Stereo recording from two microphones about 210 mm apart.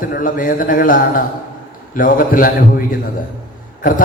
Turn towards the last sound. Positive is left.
turn(degrees=40)  # may be behind; listen again after turning